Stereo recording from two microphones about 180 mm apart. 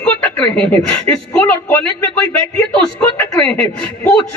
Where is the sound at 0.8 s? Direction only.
10° left (ahead or behind).